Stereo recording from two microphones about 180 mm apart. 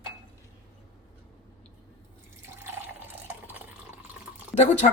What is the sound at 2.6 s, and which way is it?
Water, 10° right (ahead or behind).